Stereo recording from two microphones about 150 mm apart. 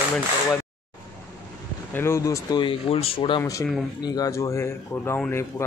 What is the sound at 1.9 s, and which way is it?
Speech, 20° left (ahead or behind).